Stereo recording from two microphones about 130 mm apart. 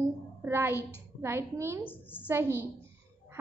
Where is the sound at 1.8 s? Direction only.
15° left (ahead or behind).